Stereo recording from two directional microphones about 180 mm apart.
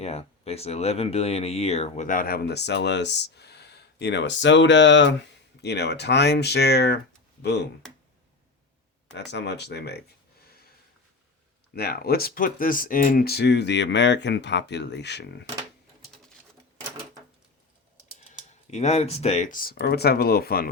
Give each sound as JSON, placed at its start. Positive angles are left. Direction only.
{"t": 0.0, "sound": "speech", "side_deg": 35}
{"t": 5.6, "sound": "speech", "side_deg": 70}
{"t": 9.1, "sound": "speech", "side_deg": 75}
{"t": 10.4, "sound": "a sound", "side_deg": 60}
{"t": 11.7, "sound": "speech", "side_deg": 60}
{"t": 18.7, "sound": "speech", "side_deg": 40}
{"t": 19.7, "sound": "speech", "side_deg": 65}